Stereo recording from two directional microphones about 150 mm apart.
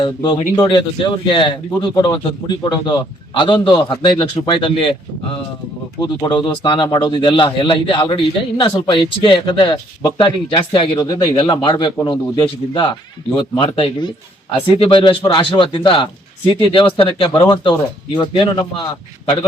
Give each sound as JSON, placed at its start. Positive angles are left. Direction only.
{"t": 0.0, "sound": "a man's voice", "side_deg": 30}
{"t": 6.0, "sound": "a man's voice", "side_deg": 30}